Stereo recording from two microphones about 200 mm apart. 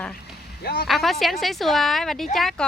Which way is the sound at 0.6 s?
50° left (ahead or behind).